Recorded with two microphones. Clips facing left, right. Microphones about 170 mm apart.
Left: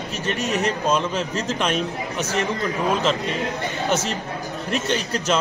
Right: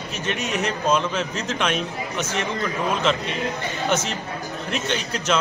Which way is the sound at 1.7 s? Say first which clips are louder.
Left 2 dB; 40° left (ahead or behind).